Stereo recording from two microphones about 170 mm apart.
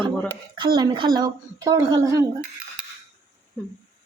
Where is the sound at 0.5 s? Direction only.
25° right (ahead or behind).